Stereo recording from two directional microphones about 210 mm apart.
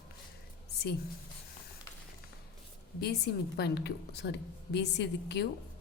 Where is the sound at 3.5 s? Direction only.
50° left (ahead or behind).